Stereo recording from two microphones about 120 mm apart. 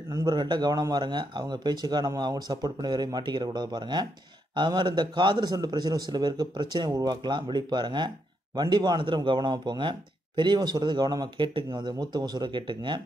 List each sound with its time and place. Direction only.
0.1 s speech: 35° right (ahead or behind)